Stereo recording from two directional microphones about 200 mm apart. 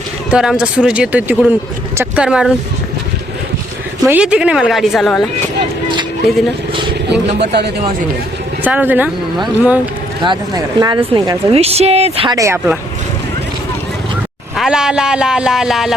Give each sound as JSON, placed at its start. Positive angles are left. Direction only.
{"t": 0.3, "sound": "a man's voice", "side_deg": -5}
{"t": 4.0, "sound": "a man's voice", "side_deg": -5}
{"t": 7.1, "sound": "speech", "side_deg": -55}
{"t": 8.6, "sound": "speech", "side_deg": -10}
{"t": 10.2, "sound": "a woman's voice", "side_deg": -20}
{"t": 12.4, "sound": "speech", "side_deg": -15}
{"t": 14.5, "sound": "a man's voice", "side_deg": -5}